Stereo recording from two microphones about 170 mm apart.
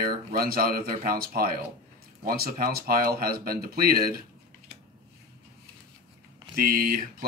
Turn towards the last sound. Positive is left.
turn(degrees=-55)  # may be behind; listen again after turning